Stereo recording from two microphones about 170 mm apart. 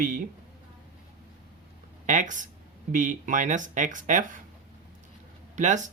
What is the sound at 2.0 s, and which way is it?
Speech, 50° right (ahead or behind).